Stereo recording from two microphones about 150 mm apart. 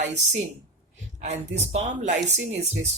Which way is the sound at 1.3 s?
50° right (ahead or behind).